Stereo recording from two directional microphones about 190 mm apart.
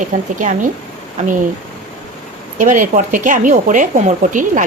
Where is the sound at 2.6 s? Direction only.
45° right (ahead or behind).